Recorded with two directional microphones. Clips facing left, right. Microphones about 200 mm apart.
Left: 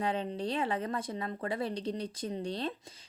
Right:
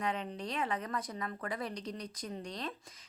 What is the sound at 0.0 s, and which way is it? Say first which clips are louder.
A woman's voice: left 4 dB; 30° left (ahead or behind).